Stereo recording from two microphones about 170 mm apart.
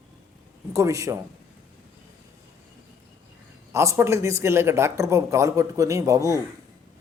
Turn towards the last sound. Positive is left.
turn(degrees=-20)  # may be behind; listen again after turning